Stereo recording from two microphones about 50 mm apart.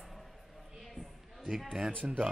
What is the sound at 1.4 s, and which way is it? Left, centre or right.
Speech, centre.